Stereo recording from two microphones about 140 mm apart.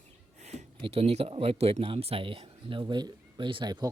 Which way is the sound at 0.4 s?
50° right (ahead or behind).